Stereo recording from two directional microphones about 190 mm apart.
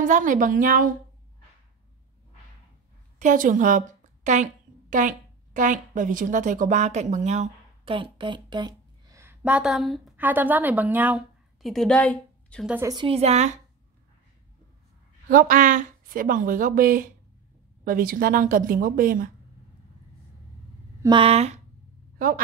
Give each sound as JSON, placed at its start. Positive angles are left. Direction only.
{"t": 0.0, "sound": "speech", "side_deg": -45}
{"t": 3.2, "sound": "a woman's voice", "side_deg": -45}
{"t": 12.6, "sound": "a woman's voice", "side_deg": -10}
{"t": 12.9, "sound": "a woman's voice", "side_deg": -30}
{"t": 15.2, "sound": "speech", "side_deg": -45}
{"t": 21.0, "sound": "a woman's voice", "side_deg": -25}